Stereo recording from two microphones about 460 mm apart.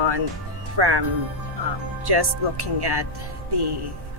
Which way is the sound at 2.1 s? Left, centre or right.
Right.